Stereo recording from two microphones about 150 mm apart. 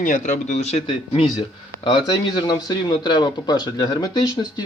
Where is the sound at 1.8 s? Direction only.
30° left (ahead or behind).